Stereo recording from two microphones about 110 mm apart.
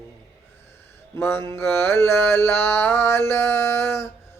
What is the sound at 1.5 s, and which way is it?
Mantra, 20° left (ahead or behind).